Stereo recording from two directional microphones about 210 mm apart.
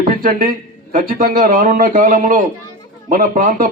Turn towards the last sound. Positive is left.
turn(degrees=-40)  # may be behind; listen again after turning